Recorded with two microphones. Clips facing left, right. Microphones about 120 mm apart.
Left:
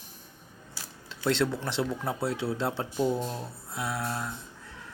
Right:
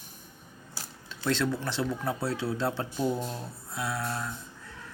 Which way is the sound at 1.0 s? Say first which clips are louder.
Left 2 dB; 25° left (ahead or behind).